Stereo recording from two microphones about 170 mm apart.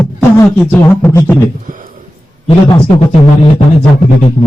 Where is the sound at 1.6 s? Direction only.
50° right (ahead or behind).